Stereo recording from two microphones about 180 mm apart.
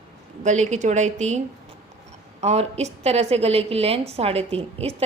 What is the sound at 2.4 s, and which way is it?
A woman's voice, 35° right (ahead or behind).